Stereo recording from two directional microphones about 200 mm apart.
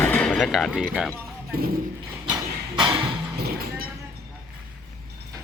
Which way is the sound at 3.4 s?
50° right (ahead or behind).